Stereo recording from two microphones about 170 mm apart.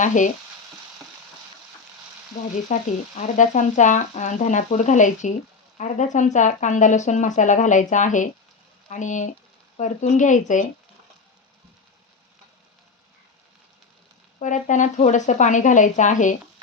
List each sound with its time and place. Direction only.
0.0 s speech: 45° left (ahead or behind)
2.7 s speech: 40° left (ahead or behind)
14.3 s speech: 45° left (ahead or behind)